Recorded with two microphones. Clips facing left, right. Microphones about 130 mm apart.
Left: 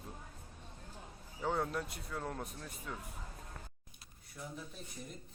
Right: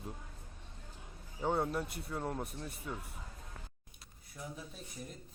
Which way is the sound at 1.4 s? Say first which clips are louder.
Right 2 dB; 20° right (ahead or behind).